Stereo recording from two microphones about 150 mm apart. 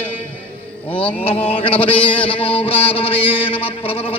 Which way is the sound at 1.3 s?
40° left (ahead or behind).